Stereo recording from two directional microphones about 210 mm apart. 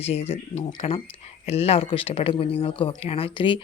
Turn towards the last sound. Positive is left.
turn(degrees=25)  # may be behind; listen again after turning